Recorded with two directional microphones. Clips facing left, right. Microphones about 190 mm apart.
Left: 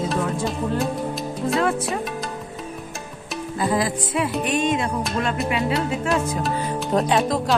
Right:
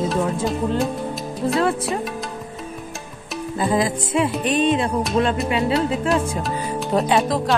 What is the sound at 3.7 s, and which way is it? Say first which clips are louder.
Music: right 4 dB; 25° right (ahead or behind).